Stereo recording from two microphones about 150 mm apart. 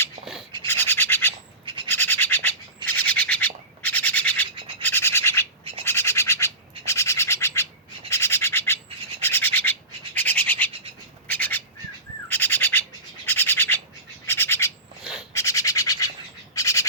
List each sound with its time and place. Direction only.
0.7 s scratch: 15° left (ahead or behind)
1.6 s scratch: 35° right (ahead or behind)
1.9 s scratch: 15° left (ahead or behind)
5.8 s bird: 15° left (ahead or behind)
8.1 s scratch: 15° left (ahead or behind)
9.2 s bird: 15° left (ahead or behind)